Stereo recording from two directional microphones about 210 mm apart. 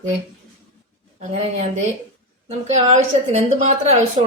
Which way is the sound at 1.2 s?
35° right (ahead or behind).